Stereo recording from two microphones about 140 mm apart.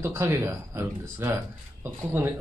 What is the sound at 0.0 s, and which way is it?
Speech, 15° right (ahead or behind).